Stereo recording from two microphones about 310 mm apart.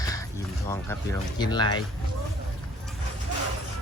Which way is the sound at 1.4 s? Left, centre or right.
Centre.